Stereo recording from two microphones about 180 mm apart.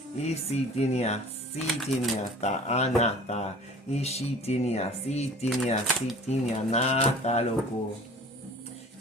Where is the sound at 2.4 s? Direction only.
40° left (ahead or behind).